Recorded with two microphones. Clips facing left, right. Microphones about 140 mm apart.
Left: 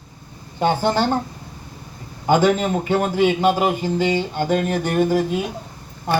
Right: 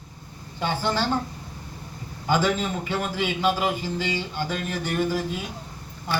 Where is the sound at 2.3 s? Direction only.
50° left (ahead or behind).